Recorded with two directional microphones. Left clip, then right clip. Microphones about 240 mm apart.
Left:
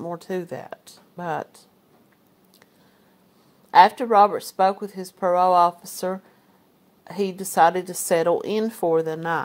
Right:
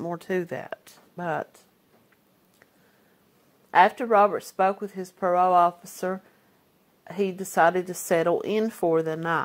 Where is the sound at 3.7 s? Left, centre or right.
Centre.